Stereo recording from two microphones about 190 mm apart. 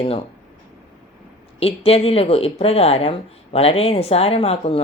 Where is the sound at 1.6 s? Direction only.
30° left (ahead or behind).